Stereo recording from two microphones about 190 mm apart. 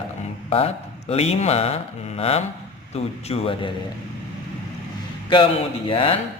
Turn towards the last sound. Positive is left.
turn(degrees=30)  # may be behind; listen again after turning